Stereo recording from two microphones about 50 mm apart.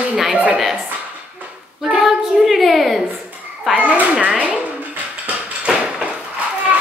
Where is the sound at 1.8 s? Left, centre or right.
Centre.